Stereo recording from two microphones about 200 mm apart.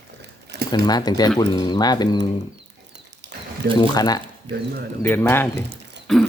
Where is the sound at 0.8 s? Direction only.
20° left (ahead or behind).